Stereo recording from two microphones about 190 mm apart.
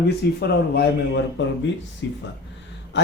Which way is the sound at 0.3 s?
55° left (ahead or behind).